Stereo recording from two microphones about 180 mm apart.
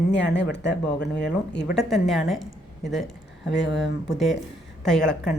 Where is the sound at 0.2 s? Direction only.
75° left (ahead or behind).